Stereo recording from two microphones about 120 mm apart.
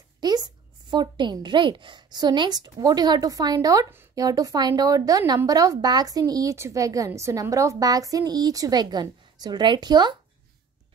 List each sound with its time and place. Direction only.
0.2 s a woman's voice: 35° right (ahead or behind)